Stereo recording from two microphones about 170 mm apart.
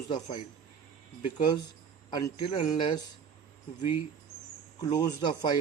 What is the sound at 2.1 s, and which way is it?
Speech, 20° left (ahead or behind).